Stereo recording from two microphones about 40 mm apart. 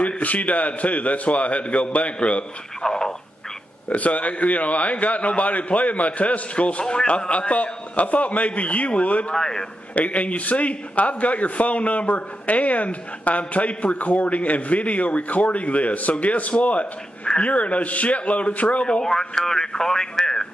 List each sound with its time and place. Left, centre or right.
0.0 s a man's voice: left
2.8 s a man's voice: centre
3.9 s a man's voice: left
9.3 s a man's voice: centre
9.9 s a man's voice: left
18.9 s a man's voice: centre